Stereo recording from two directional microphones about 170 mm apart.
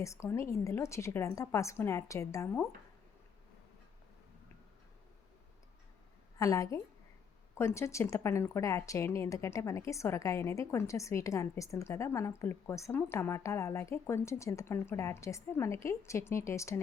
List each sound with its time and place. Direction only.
0.0 s speech: 15° left (ahead or behind)
6.4 s a woman's voice: 20° left (ahead or behind)